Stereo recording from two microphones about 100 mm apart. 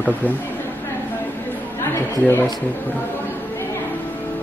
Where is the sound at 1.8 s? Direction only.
25° left (ahead or behind).